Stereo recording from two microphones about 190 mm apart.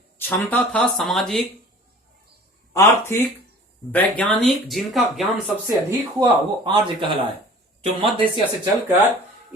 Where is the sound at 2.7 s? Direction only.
15° left (ahead or behind).